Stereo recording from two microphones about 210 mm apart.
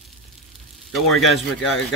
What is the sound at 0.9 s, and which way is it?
Speech, centre (ahead or behind).